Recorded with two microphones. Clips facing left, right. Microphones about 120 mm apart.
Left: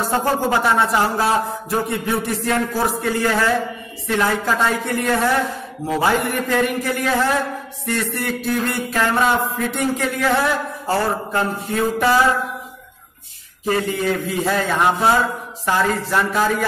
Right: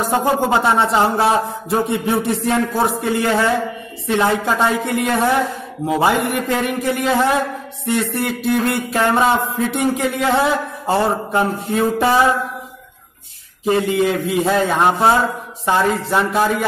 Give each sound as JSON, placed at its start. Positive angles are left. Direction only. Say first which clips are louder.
{"t": 0.0, "sound": "a man's voice", "louder": "right 2 dB", "side_deg": -15}
{"t": 13.7, "sound": "a man's voice", "louder": "right 4 dB", "side_deg": -20}